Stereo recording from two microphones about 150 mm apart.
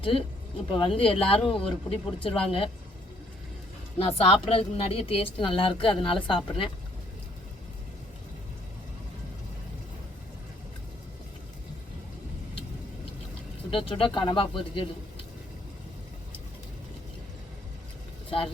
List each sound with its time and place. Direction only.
0.0 s speech: 35° left (ahead or behind)
3.9 s speech: 40° left (ahead or behind)
13.7 s speech: 35° left (ahead or behind)